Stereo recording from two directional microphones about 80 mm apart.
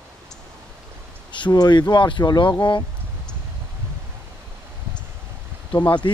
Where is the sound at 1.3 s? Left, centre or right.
Left.